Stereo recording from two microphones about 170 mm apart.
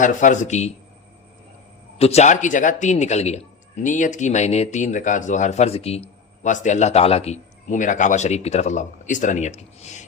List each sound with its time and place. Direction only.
0.0 s a man's voice: 50° left (ahead or behind)
2.0 s a man's voice: 40° left (ahead or behind)